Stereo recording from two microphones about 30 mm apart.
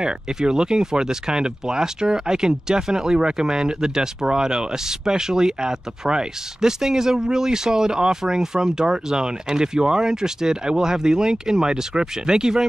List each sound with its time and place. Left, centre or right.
0.0 s speech: right